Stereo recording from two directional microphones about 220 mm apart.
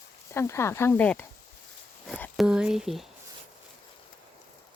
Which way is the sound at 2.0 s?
5° left (ahead or behind).